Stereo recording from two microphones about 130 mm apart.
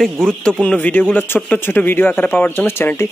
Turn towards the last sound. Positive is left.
turn(degrees=15)  # may be behind; listen again after turning